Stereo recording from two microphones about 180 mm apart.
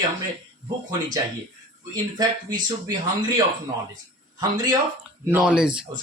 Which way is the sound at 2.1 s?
20° right (ahead or behind).